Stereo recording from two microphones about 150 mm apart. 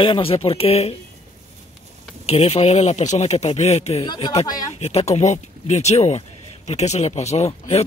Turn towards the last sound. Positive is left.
turn(degrees=45)  # may be behind; listen again after turning